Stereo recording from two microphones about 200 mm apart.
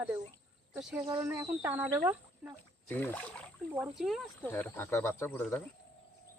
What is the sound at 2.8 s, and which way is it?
Speech, 10° left (ahead or behind).